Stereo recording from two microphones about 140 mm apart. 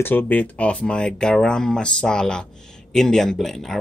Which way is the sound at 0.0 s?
15° left (ahead or behind).